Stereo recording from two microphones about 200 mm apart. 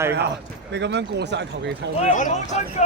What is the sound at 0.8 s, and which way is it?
Speech, 60° right (ahead or behind).